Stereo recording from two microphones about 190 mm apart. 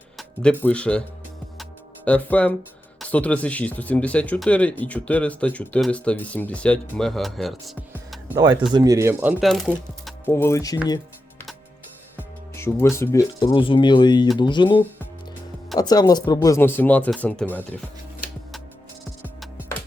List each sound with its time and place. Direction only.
0.2 s speech: 5° left (ahead or behind)
2.0 s speech: 5° left (ahead or behind)
8.7 s speech: 20° right (ahead or behind)
9.4 s speech: centre (ahead or behind)
10.1 s speech: 10° left (ahead or behind)
12.1 s speech: 15° left (ahead or behind)
15.8 s speech: 20° left (ahead or behind)